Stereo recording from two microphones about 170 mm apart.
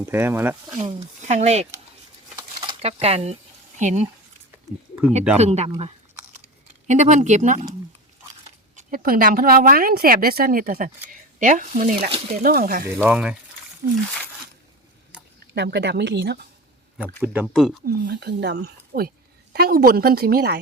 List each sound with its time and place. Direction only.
0.1 s speech: 15° right (ahead or behind)
1.2 s speech: 40° right (ahead or behind)
5.4 s speech: 40° right (ahead or behind)
6.8 s speech: 45° right (ahead or behind); by 12.9 s 60° right (ahead or behind)
12.9 s speech: 10° right (ahead or behind)
15.5 s speech: 85° right
17.2 s speech: 5° right (ahead or behind)
17.8 s speech: 65° right (ahead or behind)